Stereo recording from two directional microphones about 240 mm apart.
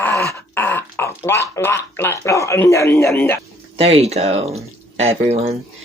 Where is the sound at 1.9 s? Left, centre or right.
Centre.